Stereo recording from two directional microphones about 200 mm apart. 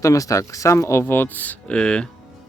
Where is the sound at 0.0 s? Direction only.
15° left (ahead or behind).